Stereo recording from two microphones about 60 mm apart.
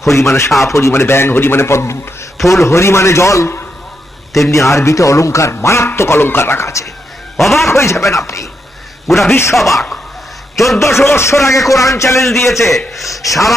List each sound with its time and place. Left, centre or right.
0.0 s speech: left
6.0 s speech: left
7.3 s a man's voice: centre
7.7 s speech: left
9.0 s a man's voice: centre
9.3 s speech: left
9.6 s a man's voice: centre
10.8 s speech: left
11.7 s speech: left
12.2 s a man's voice: centre
13.1 s speech: left